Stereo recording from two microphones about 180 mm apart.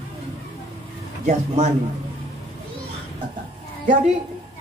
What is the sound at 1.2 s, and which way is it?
Speech, 40° right (ahead or behind).